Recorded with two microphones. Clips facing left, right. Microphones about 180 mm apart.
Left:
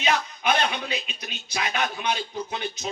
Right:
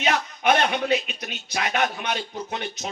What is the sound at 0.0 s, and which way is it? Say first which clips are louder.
A man's voice: right 2 dB; 50° right (ahead or behind).